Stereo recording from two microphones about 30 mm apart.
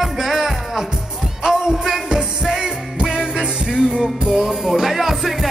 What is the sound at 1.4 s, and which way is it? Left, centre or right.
Music, right.